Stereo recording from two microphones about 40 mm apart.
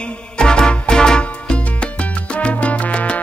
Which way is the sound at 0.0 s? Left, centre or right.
Left.